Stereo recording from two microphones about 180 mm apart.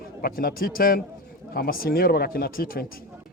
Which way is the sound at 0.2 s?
55° left (ahead or behind).